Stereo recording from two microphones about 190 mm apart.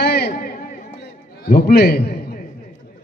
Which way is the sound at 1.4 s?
50° left (ahead or behind).